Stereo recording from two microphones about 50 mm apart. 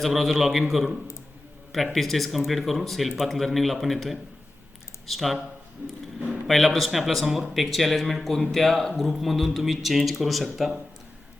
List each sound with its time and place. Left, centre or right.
0.0 s speech: centre
5.8 s a sound: right
6.5 s speech: centre